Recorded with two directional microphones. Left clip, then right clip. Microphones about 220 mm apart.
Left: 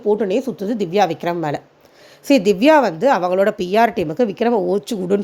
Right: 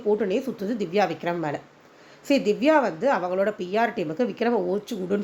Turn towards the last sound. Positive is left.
turn(degrees=30)  # may be behind; listen again after turning